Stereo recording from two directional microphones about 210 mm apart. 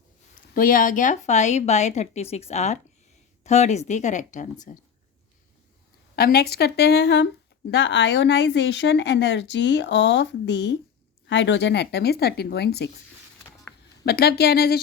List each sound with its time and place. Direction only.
0.5 s speech: 40° left (ahead or behind)
6.1 s speech: 45° left (ahead or behind)
14.0 s speech: 50° left (ahead or behind)